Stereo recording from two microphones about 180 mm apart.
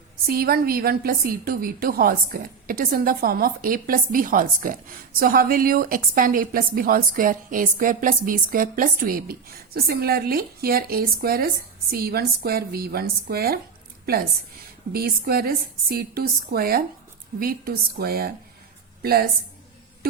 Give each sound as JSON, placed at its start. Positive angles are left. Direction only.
{"t": 0.3, "sound": "a woman's voice", "side_deg": -55}
{"t": 14.9, "sound": "a woman's voice", "side_deg": -60}